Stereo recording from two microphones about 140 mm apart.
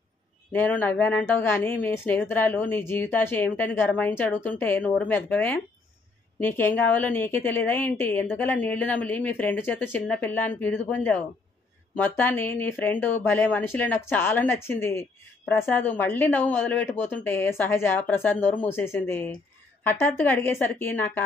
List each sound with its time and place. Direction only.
0.5 s a woman's voice: 15° left (ahead or behind)